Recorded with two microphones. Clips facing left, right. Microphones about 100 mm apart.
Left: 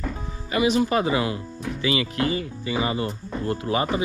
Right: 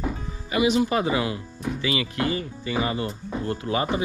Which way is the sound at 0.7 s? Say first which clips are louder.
Left 1 dB; 25° right (ahead or behind).